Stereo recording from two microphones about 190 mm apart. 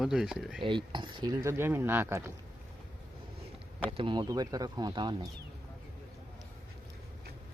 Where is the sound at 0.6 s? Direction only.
25° right (ahead or behind).